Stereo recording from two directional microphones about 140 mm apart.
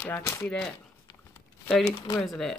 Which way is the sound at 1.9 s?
30° left (ahead or behind).